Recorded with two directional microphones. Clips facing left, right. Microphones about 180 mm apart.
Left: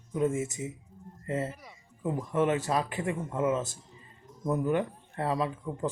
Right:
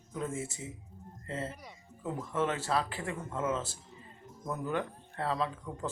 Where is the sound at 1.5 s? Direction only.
Centre (ahead or behind).